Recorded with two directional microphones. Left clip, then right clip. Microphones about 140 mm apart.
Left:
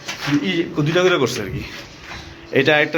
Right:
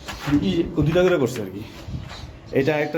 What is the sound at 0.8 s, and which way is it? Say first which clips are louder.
Speech: left 2 dB; 50° right (ahead or behind).